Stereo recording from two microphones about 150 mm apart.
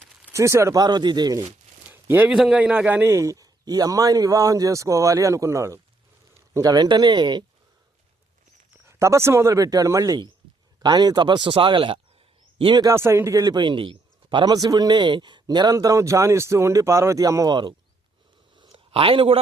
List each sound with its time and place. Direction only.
0.3 s a man's voice: 20° right (ahead or behind)
1.9 s a man's voice: 15° right (ahead or behind); by 7.4 s 30° right (ahead or behind)
8.8 s a man's voice: 20° right (ahead or behind); by 19.4 s 40° right (ahead or behind)